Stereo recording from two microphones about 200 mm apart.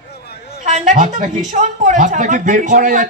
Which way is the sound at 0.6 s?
35° right (ahead or behind).